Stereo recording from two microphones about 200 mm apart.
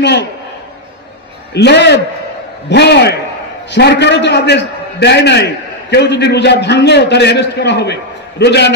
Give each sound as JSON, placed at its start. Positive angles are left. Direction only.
{"t": 0.0, "sound": "a man's voice", "side_deg": 60}
{"t": 1.5, "sound": "a man's voice", "side_deg": 55}